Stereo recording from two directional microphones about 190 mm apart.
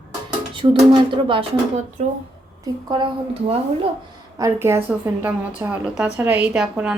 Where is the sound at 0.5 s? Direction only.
25° right (ahead or behind).